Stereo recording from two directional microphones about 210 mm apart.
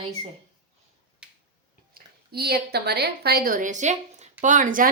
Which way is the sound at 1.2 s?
5° right (ahead or behind).